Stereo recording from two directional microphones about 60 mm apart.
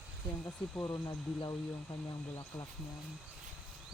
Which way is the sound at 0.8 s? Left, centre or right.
Left.